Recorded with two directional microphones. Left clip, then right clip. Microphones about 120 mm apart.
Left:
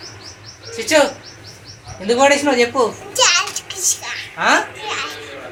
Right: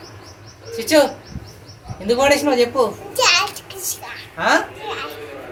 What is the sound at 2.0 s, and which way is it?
Speech, 55° left (ahead or behind).